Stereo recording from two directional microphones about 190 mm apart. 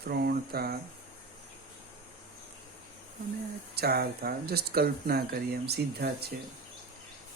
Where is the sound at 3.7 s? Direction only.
55° right (ahead or behind).